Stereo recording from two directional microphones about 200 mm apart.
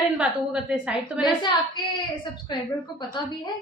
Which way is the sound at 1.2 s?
20° left (ahead or behind).